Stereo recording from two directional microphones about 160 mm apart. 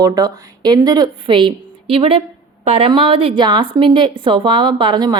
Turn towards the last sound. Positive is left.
turn(degrees=-25)  # may be behind; listen again after turning